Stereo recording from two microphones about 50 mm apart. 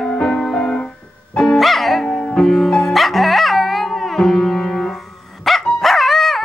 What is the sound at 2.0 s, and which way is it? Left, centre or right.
Music, centre.